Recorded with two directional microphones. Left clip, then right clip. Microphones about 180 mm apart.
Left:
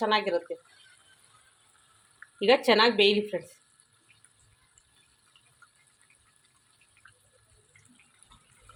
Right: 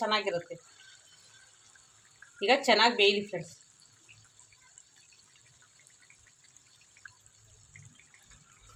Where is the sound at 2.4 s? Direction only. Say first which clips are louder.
Left 2 dB; 30° left (ahead or behind).